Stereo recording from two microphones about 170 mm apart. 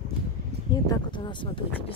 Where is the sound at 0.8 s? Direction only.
25° left (ahead or behind).